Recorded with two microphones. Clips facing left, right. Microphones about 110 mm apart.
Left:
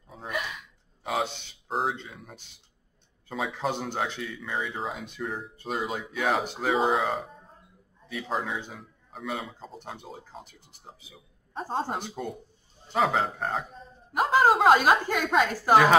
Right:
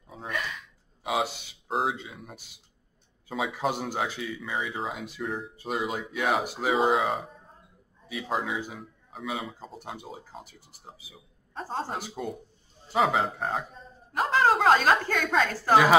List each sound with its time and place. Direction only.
0.3 s a sound: 20° left (ahead or behind)
1.0 s speech: 5° right (ahead or behind)
11.6 s a man's voice: 15° left (ahead or behind)
12.0 s a woman's voice: centre (ahead or behind)